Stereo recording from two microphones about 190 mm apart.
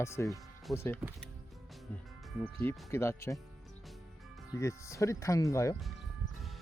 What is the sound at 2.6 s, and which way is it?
Speech, 15° left (ahead or behind).